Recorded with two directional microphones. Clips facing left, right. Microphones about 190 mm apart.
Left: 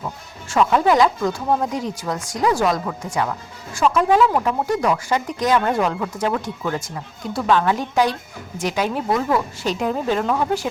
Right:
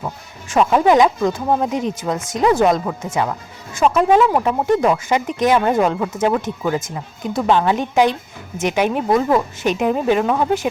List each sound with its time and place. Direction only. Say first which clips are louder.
0.0 s speech: right 2 dB; 20° right (ahead or behind)